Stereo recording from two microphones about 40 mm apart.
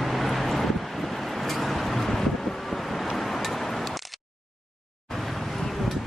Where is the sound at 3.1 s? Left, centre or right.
Centre.